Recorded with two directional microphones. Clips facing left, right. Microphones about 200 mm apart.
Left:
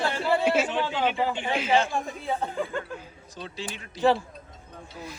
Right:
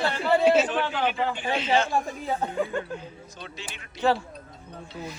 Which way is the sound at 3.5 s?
35° left (ahead or behind).